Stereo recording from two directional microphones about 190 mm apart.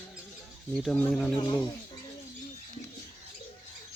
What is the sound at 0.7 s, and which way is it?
Speech, 5° left (ahead or behind).